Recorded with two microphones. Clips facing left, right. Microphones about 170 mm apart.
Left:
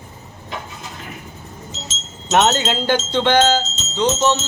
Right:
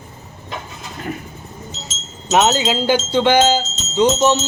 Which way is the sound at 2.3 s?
5° right (ahead or behind).